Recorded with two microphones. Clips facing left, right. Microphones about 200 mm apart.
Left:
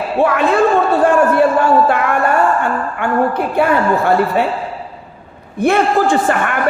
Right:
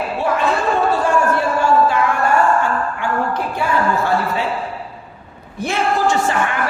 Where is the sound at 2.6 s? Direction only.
60° left (ahead or behind).